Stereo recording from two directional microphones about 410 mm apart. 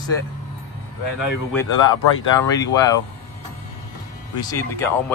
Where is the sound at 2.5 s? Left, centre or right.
Centre.